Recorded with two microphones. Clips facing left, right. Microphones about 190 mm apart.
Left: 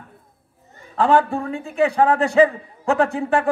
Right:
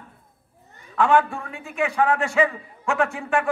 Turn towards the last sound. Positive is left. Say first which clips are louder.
# left 4 dB
turn(degrees=35)  # may be behind; listen again after turning